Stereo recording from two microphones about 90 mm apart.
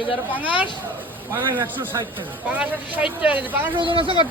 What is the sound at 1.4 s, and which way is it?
Speech, 65° right (ahead or behind).